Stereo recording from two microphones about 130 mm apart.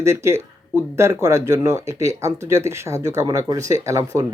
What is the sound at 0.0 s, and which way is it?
Speech, 20° right (ahead or behind).